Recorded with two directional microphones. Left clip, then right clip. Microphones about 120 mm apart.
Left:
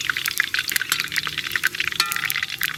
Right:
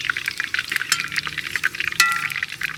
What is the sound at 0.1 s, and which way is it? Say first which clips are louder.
Stir: left 2 dB; 40° left (ahead or behind).